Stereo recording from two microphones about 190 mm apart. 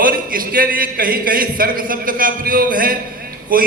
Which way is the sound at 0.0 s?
50° right (ahead or behind).